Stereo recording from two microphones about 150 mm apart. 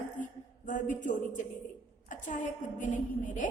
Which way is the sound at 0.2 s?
60° left (ahead or behind).